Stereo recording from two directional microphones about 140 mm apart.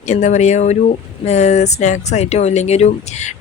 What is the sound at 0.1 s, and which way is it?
Speech, 60° left (ahead or behind).